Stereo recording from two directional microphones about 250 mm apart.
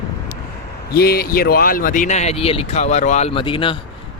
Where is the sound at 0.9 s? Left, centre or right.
Left.